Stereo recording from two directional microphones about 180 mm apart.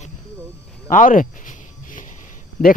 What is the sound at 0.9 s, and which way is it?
Cricket, 45° left (ahead or behind).